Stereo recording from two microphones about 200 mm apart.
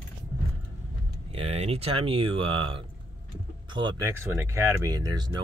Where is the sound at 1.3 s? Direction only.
30° right (ahead or behind).